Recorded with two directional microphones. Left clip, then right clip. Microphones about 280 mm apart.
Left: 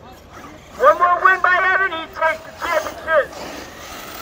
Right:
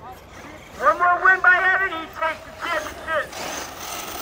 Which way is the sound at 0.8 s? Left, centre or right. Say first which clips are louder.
Left 4 dB; left.